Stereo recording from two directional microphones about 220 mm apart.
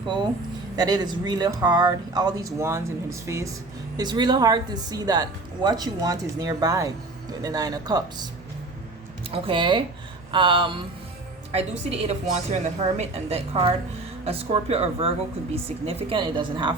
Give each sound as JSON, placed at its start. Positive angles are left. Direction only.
{"t": 0.8, "sound": "speech", "side_deg": -20}
{"t": 9.3, "sound": "a woman's voice", "side_deg": -25}